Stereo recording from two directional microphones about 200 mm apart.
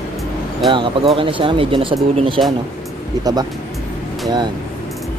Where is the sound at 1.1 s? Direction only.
25° right (ahead or behind).